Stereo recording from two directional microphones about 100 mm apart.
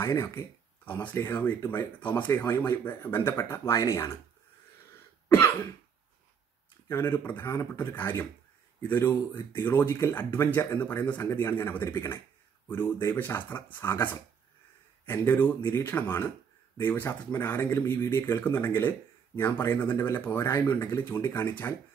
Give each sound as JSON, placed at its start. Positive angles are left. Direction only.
{"t": 0.0, "sound": "speech", "side_deg": 25}
{"t": 6.9, "sound": "speech", "side_deg": 20}